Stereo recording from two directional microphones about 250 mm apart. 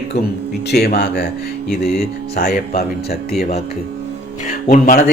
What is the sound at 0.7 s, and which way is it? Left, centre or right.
Speech, left.